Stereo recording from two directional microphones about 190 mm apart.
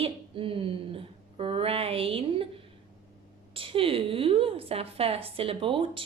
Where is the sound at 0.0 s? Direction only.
30° right (ahead or behind).